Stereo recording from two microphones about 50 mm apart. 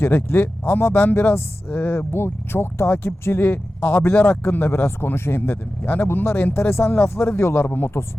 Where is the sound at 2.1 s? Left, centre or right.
Left.